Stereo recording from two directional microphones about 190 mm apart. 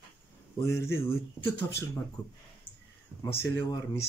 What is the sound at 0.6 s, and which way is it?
Speech, 15° left (ahead or behind).